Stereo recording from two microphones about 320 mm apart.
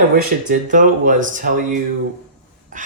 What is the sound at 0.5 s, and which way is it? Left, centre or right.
Speech, right.